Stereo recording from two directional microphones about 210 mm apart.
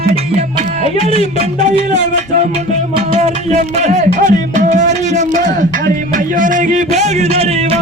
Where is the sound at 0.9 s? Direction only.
30° right (ahead or behind).